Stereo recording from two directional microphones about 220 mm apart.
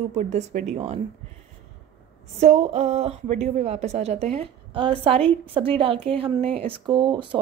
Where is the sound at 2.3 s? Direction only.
30° right (ahead or behind).